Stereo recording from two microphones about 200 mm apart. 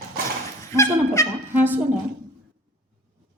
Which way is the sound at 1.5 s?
10° right (ahead or behind).